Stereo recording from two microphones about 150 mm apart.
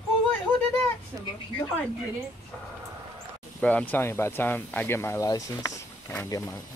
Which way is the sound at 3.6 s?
10° left (ahead or behind).